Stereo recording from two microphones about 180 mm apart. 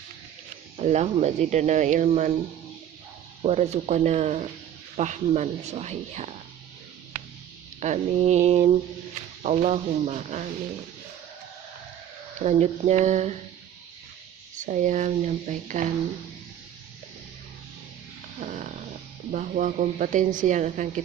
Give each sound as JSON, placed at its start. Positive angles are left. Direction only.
{"t": 0.8, "sound": "speech", "side_deg": -35}
{"t": 3.4, "sound": "speech", "side_deg": -35}
{"t": 7.8, "sound": "speech", "side_deg": -40}
{"t": 12.4, "sound": "speech", "side_deg": -40}
{"t": 14.5, "sound": "a woman's voice", "side_deg": -45}
{"t": 18.3, "sound": "a woman's voice", "side_deg": -40}